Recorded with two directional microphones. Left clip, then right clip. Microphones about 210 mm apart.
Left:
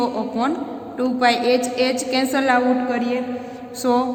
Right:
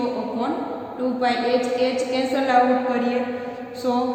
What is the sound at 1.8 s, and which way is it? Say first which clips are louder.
Speech: left 2 dB; 30° left (ahead or behind).